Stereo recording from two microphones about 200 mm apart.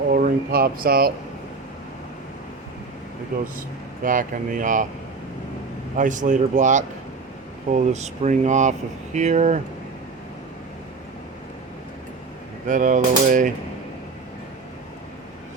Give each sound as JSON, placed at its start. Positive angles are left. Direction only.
{"t": 0.1, "sound": "a sound", "side_deg": -45}
{"t": 4.0, "sound": "speech", "side_deg": -40}
{"t": 6.0, "sound": "speech", "side_deg": -40}
{"t": 12.6, "sound": "speech", "side_deg": -40}